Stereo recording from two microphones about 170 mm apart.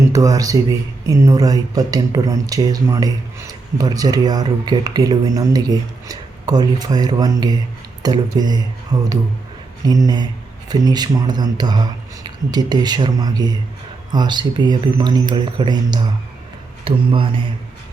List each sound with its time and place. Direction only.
0.1 s a man's voice: 20° right (ahead or behind)